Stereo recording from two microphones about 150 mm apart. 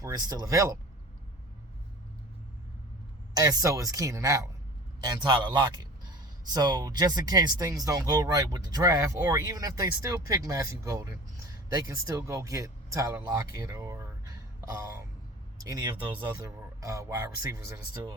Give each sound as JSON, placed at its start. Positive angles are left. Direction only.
{"t": 0.0, "sound": "speech", "side_deg": -25}
{"t": 3.3, "sound": "speech", "side_deg": -25}